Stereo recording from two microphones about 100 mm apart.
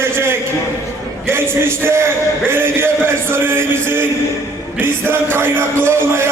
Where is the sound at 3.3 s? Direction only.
25° right (ahead or behind).